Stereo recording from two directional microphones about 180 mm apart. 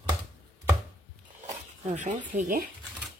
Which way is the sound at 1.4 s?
40° right (ahead or behind).